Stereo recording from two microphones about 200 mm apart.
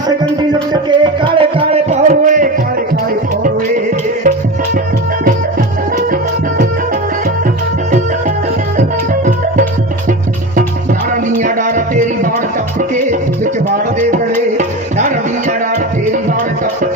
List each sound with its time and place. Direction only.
0.7 s music: 25° right (ahead or behind); by 2.5 s 40° right (ahead or behind)
11.3 s music: 40° right (ahead or behind)
14.1 s music: 40° right (ahead or behind)